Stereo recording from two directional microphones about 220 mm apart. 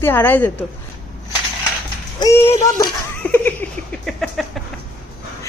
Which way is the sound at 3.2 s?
5° left (ahead or behind).